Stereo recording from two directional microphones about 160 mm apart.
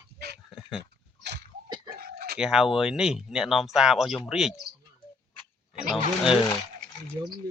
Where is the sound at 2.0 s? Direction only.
80° right.